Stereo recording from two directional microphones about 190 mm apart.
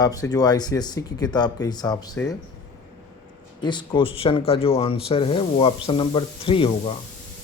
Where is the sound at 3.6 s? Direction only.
25° left (ahead or behind).